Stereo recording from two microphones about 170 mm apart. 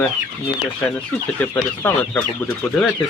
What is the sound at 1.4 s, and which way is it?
Speech, 15° left (ahead or behind).